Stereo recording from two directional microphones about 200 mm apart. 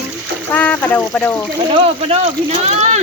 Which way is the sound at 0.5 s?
5° left (ahead or behind).